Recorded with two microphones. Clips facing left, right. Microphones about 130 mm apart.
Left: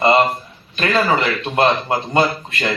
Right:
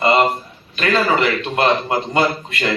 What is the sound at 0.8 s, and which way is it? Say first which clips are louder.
Speech: even; 25° left (ahead or behind).